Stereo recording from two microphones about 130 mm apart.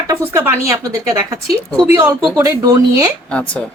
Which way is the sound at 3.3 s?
10° left (ahead or behind).